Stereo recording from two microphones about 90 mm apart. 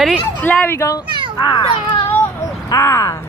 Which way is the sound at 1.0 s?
60° right (ahead or behind).